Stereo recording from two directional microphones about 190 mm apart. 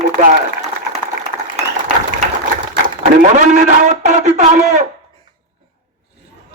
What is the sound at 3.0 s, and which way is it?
A man's voice, 40° right (ahead or behind).